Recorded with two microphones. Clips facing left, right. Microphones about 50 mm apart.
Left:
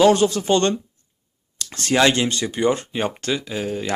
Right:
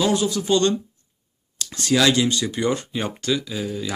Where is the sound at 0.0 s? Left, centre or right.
Left.